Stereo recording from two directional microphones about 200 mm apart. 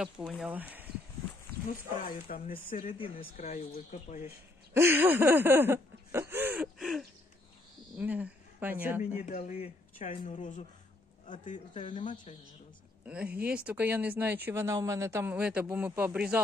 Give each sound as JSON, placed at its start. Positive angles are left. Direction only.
{"t": 0.3, "sound": "speech", "side_deg": -5}
{"t": 1.7, "sound": "speech", "side_deg": 45}
{"t": 2.8, "sound": "speech", "side_deg": 30}
{"t": 4.7, "sound": "a sound", "side_deg": -10}
{"t": 8.0, "sound": "speech", "side_deg": -5}
{"t": 9.2, "sound": "speech", "side_deg": 40}
{"t": 13.0, "sound": "speech", "side_deg": -5}